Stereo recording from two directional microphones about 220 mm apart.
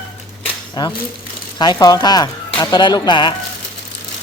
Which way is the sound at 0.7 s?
20° left (ahead or behind).